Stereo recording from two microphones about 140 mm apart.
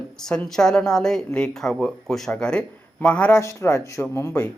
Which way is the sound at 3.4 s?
20° left (ahead or behind).